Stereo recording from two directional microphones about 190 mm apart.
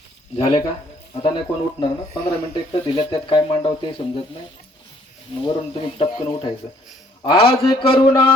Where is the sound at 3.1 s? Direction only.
30° left (ahead or behind).